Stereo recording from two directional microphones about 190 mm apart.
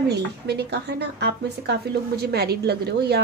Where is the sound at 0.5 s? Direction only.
60° right (ahead or behind).